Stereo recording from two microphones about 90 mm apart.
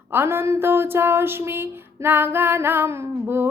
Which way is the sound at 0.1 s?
25° right (ahead or behind).